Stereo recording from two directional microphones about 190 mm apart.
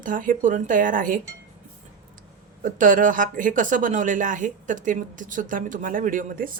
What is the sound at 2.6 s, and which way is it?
A woman's voice, 45° right (ahead or behind).